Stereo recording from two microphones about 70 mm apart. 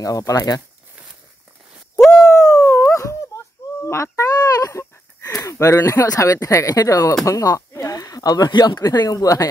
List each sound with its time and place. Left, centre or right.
0.0 s speech: left
2.2 s dog: left
2.9 s wail: left
3.8 s a sound: left
4.4 s a sound: left
5.4 s speech: left
7.9 s speech: left